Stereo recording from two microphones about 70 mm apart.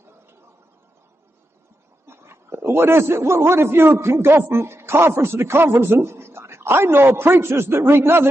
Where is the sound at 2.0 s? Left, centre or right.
Right.